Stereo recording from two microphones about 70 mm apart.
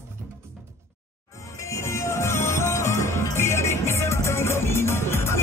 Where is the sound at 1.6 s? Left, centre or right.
Left.